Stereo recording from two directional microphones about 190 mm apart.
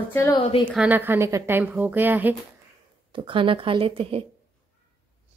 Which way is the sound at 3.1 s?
25° right (ahead or behind).